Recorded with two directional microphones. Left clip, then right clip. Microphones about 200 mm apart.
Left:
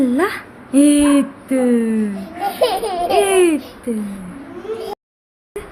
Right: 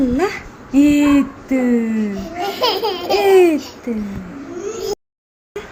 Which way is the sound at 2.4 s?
10° left (ahead or behind).